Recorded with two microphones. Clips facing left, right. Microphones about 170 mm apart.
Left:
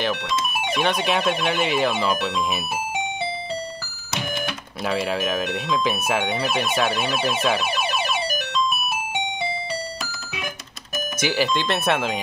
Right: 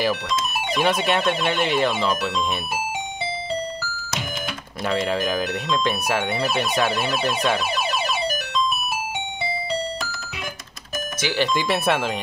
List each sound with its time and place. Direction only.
0.7 s speech: 5° right (ahead or behind)
4.8 s speech: 5° left (ahead or behind)
11.1 s speech: 15° left (ahead or behind)
11.4 s speech: 5° right (ahead or behind)